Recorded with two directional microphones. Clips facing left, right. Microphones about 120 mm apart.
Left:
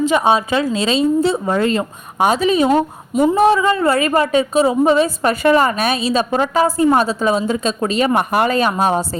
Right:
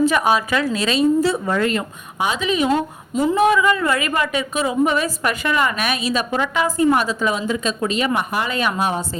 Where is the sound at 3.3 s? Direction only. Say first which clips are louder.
Left 1 dB; 35° left (ahead or behind).